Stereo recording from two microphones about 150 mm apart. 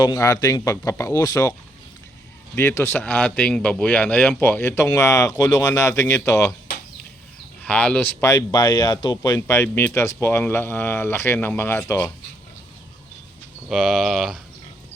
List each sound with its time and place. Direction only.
0.0 s speech: 25° left (ahead or behind)
2.6 s speech: 15° left (ahead or behind)
7.6 s speech: 5° left (ahead or behind)
8.2 s speech: 20° left (ahead or behind)
13.7 s speech: 5° right (ahead or behind)